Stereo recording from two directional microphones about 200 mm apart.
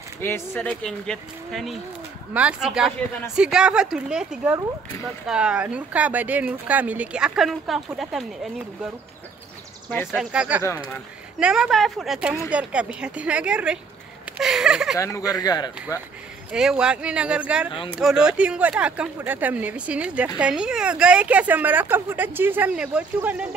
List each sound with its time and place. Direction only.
0.2 s speech: 10° left (ahead or behind)
9.8 s speech: 5° left (ahead or behind)
10.3 s speech: 5° right (ahead or behind)
15.0 s speech: 15° left (ahead or behind)
16.5 s speech: 5° right (ahead or behind)